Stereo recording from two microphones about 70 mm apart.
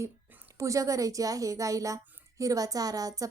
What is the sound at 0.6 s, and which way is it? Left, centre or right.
A woman's voice, right.